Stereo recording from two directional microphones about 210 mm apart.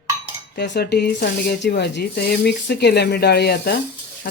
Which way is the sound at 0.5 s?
55° left (ahead or behind).